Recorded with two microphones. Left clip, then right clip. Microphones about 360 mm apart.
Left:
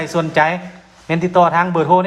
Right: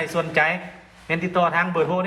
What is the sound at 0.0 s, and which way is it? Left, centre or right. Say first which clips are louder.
Speech: left 5 dB; left.